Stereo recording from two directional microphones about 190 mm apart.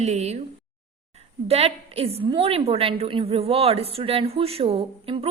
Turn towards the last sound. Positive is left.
turn(degrees=-30)  # may be behind; listen again after turning